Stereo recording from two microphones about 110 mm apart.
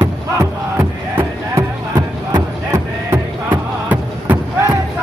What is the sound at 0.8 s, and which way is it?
Music, 25° right (ahead or behind).